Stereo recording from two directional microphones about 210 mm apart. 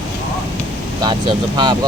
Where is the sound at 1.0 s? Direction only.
20° right (ahead or behind).